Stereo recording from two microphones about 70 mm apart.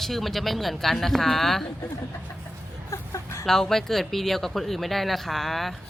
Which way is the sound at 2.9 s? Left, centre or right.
Left.